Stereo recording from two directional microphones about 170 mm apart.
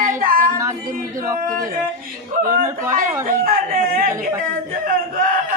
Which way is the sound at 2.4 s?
55° right (ahead or behind).